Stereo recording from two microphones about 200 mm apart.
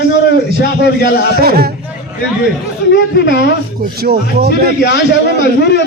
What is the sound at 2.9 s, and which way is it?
Speech, 60° left (ahead or behind).